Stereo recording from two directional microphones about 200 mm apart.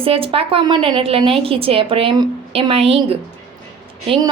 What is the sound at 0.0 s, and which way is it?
A woman's voice, 25° right (ahead or behind).